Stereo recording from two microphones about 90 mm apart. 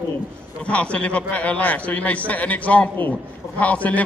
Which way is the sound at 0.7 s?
15° left (ahead or behind).